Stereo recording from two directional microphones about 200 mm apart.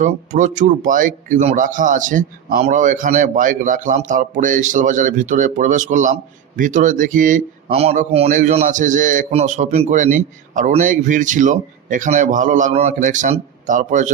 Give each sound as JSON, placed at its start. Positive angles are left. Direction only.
{"t": 0.0, "sound": "speech", "side_deg": -40}